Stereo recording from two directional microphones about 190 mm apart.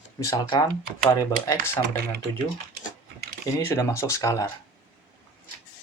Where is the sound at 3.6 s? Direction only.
15° left (ahead or behind).